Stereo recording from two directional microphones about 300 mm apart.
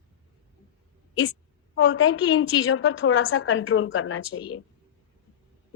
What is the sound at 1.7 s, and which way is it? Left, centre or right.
A woman's voice, left.